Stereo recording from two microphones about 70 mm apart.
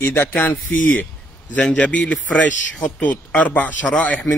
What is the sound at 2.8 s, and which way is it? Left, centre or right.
Speech, centre.